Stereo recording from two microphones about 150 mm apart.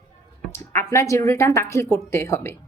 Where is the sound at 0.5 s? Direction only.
15° left (ahead or behind).